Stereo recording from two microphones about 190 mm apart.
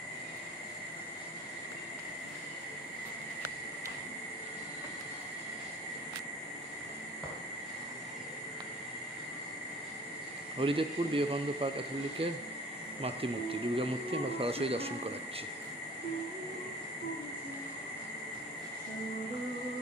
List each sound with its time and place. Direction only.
10.6 s a man's voice: 30° right (ahead or behind)
13.0 s speech: 30° right (ahead or behind)